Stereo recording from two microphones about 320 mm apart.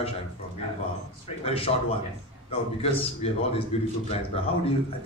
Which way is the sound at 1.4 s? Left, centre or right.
Centre.